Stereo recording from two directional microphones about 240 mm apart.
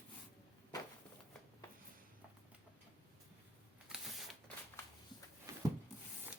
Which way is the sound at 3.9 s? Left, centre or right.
Centre.